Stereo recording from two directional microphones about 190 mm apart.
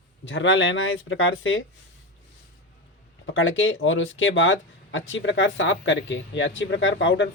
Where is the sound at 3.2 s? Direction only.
90° left.